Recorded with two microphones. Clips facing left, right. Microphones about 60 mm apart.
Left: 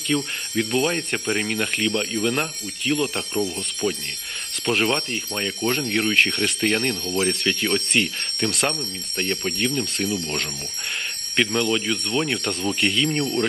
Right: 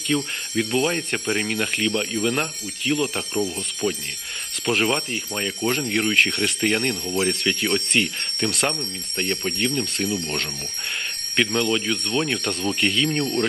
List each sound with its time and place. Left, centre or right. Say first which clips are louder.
0.1 s speech: even; centre
6.9 s speech: even; centre
7.2 s speech: even; centre